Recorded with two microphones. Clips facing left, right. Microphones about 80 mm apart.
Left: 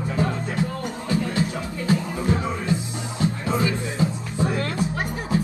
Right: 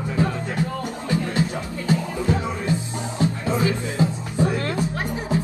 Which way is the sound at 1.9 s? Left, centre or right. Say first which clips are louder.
Right 1 dB; right.